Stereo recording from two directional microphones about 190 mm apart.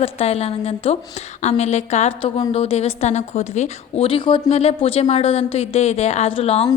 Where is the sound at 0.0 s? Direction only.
30° left (ahead or behind).